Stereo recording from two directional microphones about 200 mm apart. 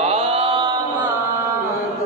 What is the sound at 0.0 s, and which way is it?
Mantra, 30° right (ahead or behind).